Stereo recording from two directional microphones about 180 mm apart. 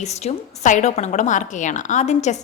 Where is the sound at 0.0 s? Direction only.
35° left (ahead or behind).